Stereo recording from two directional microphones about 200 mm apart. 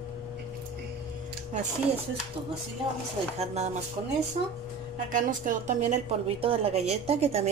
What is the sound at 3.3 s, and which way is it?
Speech, 35° right (ahead or behind).